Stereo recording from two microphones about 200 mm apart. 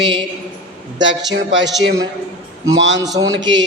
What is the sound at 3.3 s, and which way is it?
Speech, 65° right (ahead or behind).